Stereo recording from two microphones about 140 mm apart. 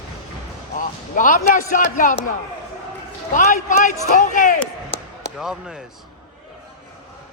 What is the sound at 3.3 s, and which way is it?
A man's voice, 70° left (ahead or behind).